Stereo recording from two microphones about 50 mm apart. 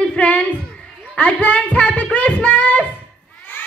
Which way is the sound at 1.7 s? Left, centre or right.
Left.